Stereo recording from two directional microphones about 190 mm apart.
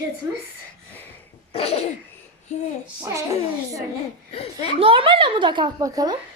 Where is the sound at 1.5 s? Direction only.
35° left (ahead or behind).